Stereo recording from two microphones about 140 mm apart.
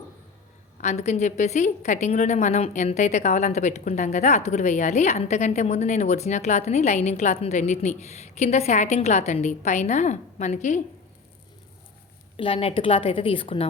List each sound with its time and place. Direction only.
0.8 s a woman's voice: 55° left (ahead or behind)
12.4 s a woman's voice: 40° left (ahead or behind)